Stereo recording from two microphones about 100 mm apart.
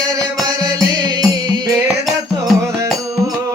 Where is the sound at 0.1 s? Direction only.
35° right (ahead or behind).